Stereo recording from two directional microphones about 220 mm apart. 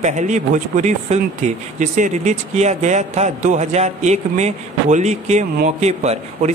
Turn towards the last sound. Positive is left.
turn(degrees=-30)  # may be behind; listen again after turning